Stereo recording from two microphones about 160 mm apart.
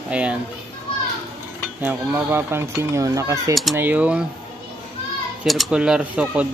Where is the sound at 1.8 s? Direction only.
10° right (ahead or behind).